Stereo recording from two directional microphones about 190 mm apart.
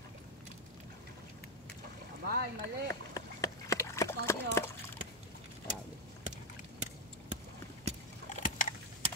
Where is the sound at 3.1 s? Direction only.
20° left (ahead or behind).